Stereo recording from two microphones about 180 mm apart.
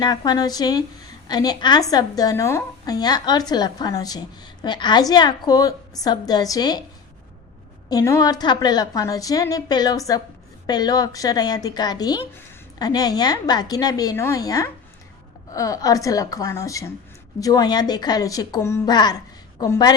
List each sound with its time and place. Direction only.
0.0 s a woman's voice: 20° left (ahead or behind)
7.9 s a woman's voice: 20° left (ahead or behind)